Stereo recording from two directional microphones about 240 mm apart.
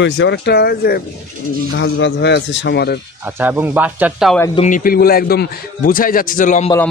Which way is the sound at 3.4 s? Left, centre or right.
Centre.